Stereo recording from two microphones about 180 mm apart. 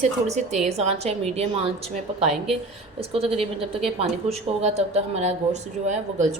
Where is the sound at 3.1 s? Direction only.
30° right (ahead or behind).